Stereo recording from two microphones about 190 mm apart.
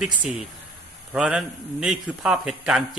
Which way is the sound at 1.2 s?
5° right (ahead or behind).